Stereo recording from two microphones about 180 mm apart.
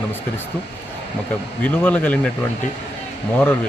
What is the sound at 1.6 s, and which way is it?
Speech, 10° left (ahead or behind).